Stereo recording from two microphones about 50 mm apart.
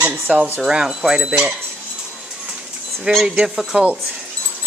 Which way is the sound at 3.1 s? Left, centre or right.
Right.